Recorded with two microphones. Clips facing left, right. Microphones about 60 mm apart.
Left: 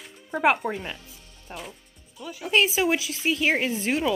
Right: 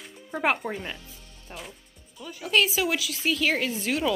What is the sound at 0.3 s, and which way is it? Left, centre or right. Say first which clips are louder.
A woman's voice: left 4 dB; centre.